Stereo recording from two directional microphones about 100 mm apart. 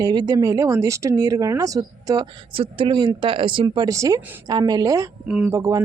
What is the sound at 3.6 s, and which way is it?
Speech, 40° right (ahead or behind).